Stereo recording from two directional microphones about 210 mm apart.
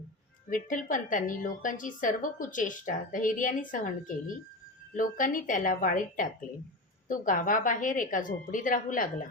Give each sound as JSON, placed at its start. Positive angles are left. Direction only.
{"t": 0.5, "sound": "a woman's voice", "side_deg": 40}